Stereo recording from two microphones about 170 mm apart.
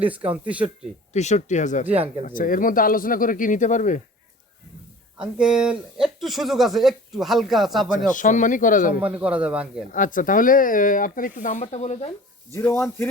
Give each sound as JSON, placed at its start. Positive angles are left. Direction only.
{"t": 0.0, "sound": "speech", "side_deg": -10}
{"t": 1.1, "sound": "speech", "side_deg": 45}
{"t": 5.1, "sound": "speech", "side_deg": -5}
{"t": 7.9, "sound": "speech", "side_deg": 50}
{"t": 9.0, "sound": "speech", "side_deg": -10}
{"t": 9.9, "sound": "speech", "side_deg": 50}
{"t": 12.5, "sound": "a man's voice", "side_deg": 10}